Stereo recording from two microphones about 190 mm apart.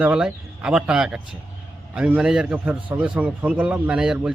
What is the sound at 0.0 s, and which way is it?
A man's voice, 5° right (ahead or behind).